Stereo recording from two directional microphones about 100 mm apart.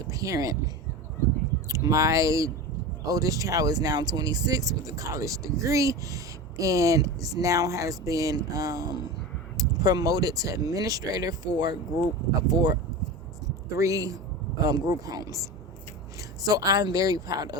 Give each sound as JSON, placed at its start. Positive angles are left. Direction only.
{"t": 0.1, "sound": "speech", "side_deg": -35}
{"t": 1.6, "sound": "speech", "side_deg": -35}
{"t": 16.5, "sound": "speech", "side_deg": -35}